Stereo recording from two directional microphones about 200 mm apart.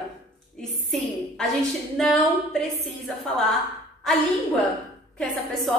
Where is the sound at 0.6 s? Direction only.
Centre (ahead or behind).